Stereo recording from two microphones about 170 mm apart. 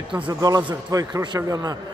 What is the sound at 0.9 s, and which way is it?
Speech, 20° right (ahead or behind).